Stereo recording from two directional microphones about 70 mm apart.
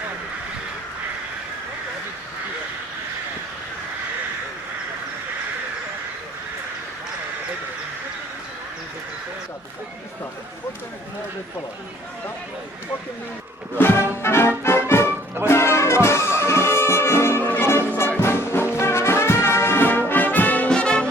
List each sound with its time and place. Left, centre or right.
13.7 s music: left
18.2 s brass instrument: left
20.7 s music: centre